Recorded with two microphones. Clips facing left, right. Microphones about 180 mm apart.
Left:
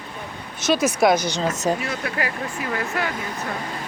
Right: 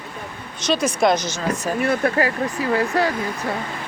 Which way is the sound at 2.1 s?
35° right (ahead or behind).